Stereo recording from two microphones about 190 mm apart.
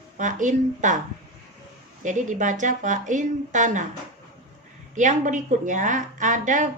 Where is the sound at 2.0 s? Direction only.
40° right (ahead or behind).